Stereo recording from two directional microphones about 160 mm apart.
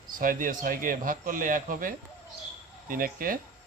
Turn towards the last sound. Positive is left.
turn(degrees=-60)  # may be behind; listen again after turning